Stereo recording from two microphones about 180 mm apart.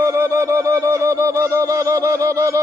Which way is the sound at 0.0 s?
15° right (ahead or behind).